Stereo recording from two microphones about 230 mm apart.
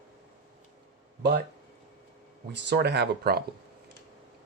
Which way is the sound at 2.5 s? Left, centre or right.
Right.